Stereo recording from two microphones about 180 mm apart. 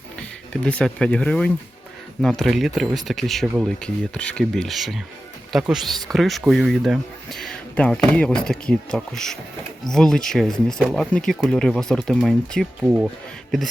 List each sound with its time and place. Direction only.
0.5 s speech: 5° left (ahead or behind)